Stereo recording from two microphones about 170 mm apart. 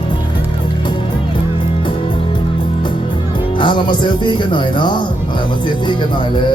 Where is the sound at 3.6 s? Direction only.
25° left (ahead or behind).